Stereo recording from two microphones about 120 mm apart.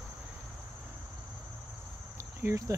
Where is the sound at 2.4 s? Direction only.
25° right (ahead or behind).